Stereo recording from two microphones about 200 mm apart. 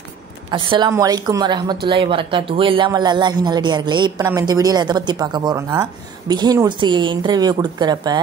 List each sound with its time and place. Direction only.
0.5 s a woman's voice: 25° right (ahead or behind)